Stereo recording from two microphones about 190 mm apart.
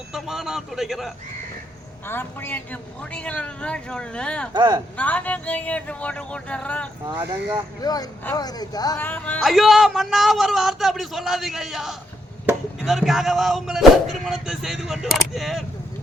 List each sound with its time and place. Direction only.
0.1 s a man's voice: centre (ahead or behind)
2.0 s speech: 10° left (ahead or behind)
3.0 s a sound: 5° left (ahead or behind)
4.5 s speech: 25° right (ahead or behind)
4.9 s speech: 10° left (ahead or behind)
7.8 s speech: 20° left (ahead or behind)
9.0 s a sound: 10° left (ahead or behind)